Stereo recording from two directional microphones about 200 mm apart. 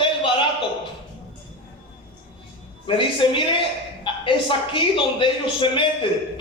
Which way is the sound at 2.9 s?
25° left (ahead or behind).